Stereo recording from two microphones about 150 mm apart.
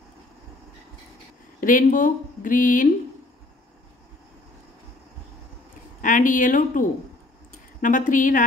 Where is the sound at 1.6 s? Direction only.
65° left (ahead or behind).